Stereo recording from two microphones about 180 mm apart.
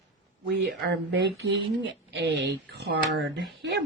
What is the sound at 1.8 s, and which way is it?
Speech, 70° right (ahead or behind).